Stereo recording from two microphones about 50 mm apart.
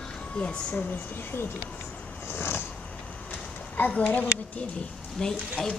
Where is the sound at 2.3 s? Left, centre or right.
Left.